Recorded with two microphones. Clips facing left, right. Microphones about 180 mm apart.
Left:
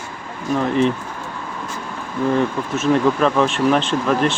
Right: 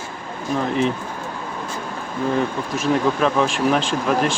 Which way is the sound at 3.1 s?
Centre (ahead or behind).